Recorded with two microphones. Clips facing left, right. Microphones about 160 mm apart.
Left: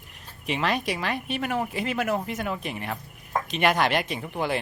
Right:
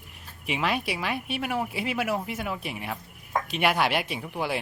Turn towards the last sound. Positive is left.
turn(degrees=-5)  # may be behind; listen again after turning